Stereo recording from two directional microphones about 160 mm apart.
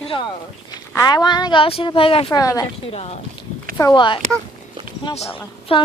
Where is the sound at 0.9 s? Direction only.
25° left (ahead or behind).